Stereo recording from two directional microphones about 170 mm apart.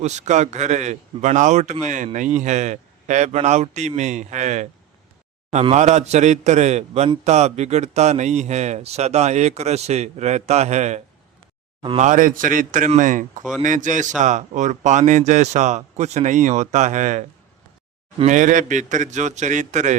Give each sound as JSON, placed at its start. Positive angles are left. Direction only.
{"t": 0.0, "sound": "speech", "side_deg": -45}